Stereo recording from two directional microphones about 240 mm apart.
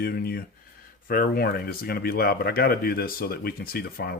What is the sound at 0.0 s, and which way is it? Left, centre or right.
Speech, left.